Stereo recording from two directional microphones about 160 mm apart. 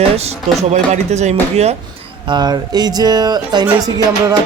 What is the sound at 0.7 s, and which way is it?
Speech, 45° right (ahead or behind).